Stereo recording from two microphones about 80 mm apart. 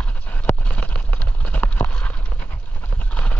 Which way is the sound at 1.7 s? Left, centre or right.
Centre.